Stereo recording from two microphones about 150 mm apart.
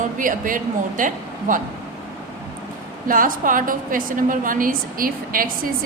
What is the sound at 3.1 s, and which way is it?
A woman's voice, 65° right (ahead or behind).